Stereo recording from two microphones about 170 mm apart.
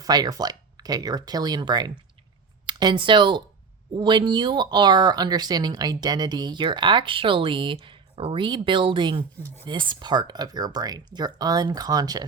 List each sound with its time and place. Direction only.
0.0 s speech: 20° right (ahead or behind)